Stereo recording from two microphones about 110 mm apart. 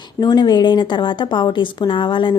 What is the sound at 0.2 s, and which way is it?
A woman's voice, 40° left (ahead or behind).